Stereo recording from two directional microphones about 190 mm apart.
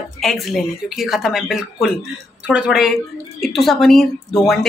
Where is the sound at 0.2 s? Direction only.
Centre (ahead or behind).